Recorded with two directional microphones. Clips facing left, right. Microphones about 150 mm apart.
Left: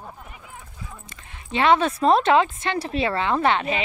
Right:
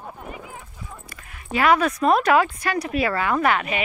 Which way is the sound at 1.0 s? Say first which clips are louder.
Right 3 dB; 25° left (ahead or behind).